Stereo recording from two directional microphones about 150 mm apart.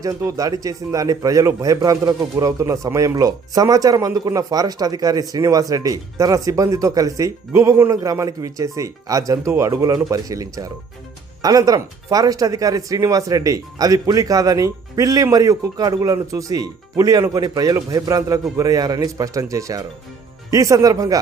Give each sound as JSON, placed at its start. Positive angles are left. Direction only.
{"t": 0.0, "sound": "a man's voice", "side_deg": -20}